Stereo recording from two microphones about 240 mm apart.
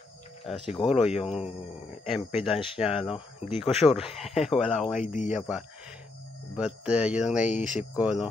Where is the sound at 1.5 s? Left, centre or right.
Left.